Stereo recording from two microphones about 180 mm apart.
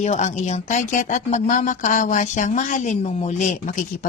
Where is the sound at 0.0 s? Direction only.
40° left (ahead or behind).